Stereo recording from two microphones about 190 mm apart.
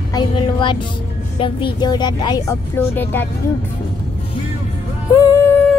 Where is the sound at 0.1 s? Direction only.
25° left (ahead or behind).